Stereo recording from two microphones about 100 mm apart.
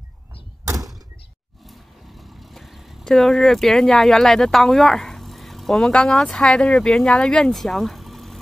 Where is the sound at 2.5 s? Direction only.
Centre (ahead or behind).